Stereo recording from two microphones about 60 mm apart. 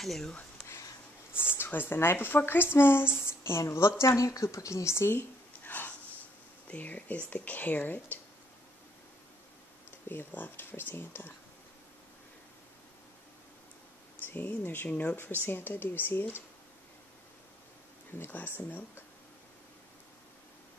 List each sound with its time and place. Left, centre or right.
0.0 s speech: centre
1.6 s a woman's voice: left
5.6 s a sound: left
6.7 s speech: left
10.0 s speech: left
14.2 s speech: left
14.9 s speech: left
15.4 s speech: left
18.1 s speech: left